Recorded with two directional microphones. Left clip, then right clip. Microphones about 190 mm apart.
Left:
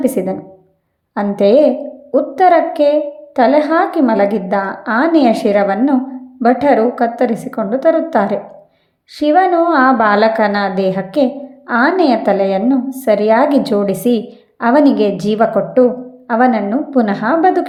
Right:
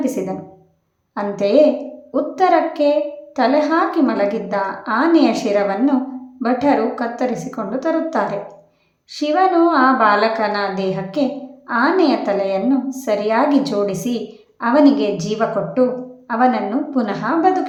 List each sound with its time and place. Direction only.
0.0 s a woman's voice: 30° left (ahead or behind)